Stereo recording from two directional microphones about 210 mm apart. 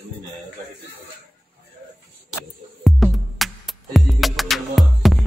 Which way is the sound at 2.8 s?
Centre (ahead or behind).